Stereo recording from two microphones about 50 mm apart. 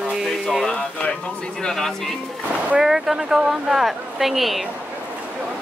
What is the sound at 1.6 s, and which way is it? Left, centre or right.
Speech, centre.